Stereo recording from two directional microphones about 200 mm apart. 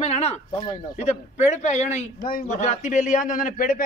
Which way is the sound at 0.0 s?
30° left (ahead or behind).